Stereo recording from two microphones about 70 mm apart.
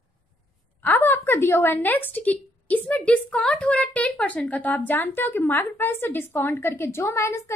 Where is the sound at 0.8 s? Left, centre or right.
Left.